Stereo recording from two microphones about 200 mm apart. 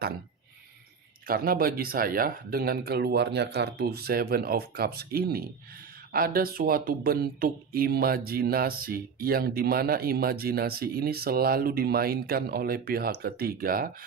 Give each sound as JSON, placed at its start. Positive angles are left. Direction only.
{"t": 1.3, "sound": "speech", "side_deg": -45}